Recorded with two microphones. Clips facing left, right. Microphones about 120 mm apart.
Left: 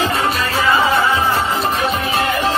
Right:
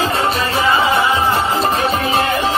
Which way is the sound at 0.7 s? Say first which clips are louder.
Even; 20° right (ahead or behind).